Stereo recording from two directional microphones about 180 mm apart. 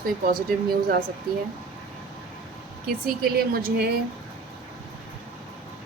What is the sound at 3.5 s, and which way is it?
Speech, 55° right (ahead or behind).